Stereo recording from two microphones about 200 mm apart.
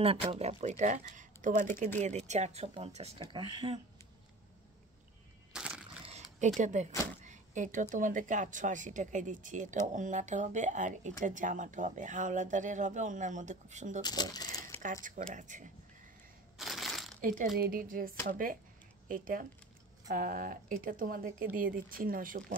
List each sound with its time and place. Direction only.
0.0 s speech: 30° right (ahead or behind)
5.5 s crushing: 5° right (ahead or behind)
6.6 s speech: 35° right (ahead or behind)
7.2 s a sound: 40° right (ahead or behind)
7.9 s speech: 40° right (ahead or behind)
14.0 s speech: 20° left (ahead or behind)
14.8 s speech: 40° right (ahead or behind)
16.5 s a sound: centre (ahead or behind)
17.2 s speech: 40° right (ahead or behind)